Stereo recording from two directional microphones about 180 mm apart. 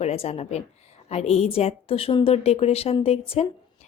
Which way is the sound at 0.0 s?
35° left (ahead or behind).